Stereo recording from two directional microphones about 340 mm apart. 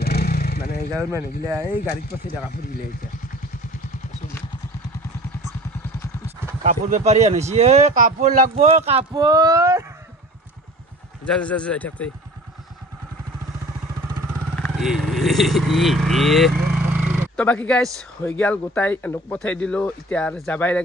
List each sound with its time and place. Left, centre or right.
0.0 s vehicle: left
6.6 s speech: right
11.2 s speech: centre
14.5 s speech: centre